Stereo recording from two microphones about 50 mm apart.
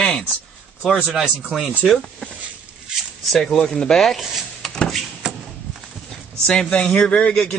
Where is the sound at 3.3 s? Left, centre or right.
Centre.